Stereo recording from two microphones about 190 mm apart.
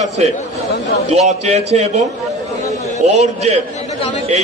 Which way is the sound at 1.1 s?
35° right (ahead or behind).